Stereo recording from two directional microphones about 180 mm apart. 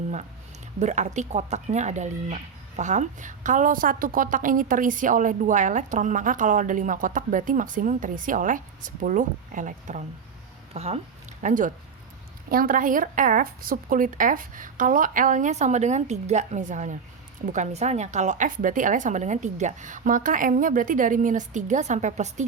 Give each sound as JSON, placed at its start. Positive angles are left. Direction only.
{"t": 0.8, "sound": "speech", "side_deg": -40}